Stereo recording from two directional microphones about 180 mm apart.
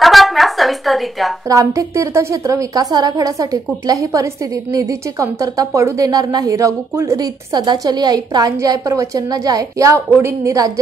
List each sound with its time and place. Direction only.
0.0 s a woman's voice: centre (ahead or behind)
1.5 s a woman's voice: 20° right (ahead or behind)